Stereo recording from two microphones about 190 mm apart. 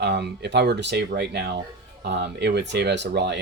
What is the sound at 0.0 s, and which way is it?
Speech, 60° right (ahead or behind).